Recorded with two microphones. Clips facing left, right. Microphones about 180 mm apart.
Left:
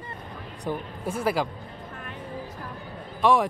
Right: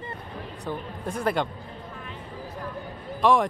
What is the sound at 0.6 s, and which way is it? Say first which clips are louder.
Speech: left 3 dB; 5° left (ahead or behind).